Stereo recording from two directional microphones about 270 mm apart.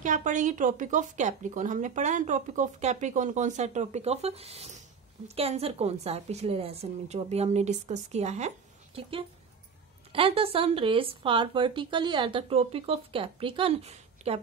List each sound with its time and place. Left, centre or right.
0.0 s speech: right